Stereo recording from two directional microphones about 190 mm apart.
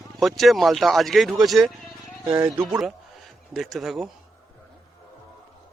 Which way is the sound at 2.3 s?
20° right (ahead or behind).